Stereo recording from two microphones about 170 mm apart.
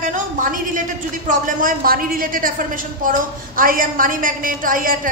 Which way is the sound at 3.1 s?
55° right (ahead or behind).